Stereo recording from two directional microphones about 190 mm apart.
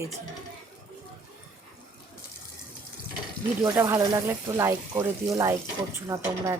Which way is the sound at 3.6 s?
15° right (ahead or behind).